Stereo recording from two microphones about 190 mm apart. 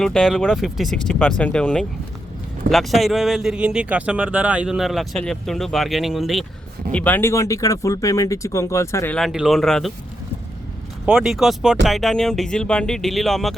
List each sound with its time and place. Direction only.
0.0 s speech: 5° left (ahead or behind)
9.1 s speech: centre (ahead or behind)
11.0 s speech: 5° right (ahead or behind)